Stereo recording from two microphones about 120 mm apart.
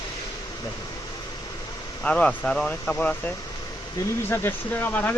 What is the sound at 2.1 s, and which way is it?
Speech, 10° left (ahead or behind).